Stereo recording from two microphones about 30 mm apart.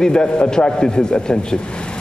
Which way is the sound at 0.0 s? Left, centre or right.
Left.